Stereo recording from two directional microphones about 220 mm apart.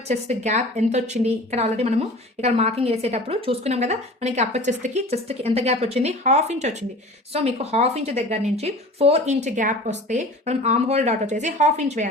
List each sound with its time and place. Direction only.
0.1 s a woman's voice: 30° right (ahead or behind)